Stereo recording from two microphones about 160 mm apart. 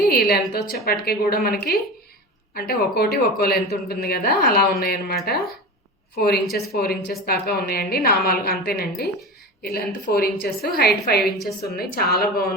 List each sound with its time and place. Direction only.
0.0 s speech: 75° left (ahead or behind)